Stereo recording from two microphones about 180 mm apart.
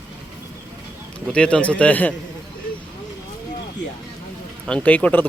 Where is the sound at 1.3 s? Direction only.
5° left (ahead or behind).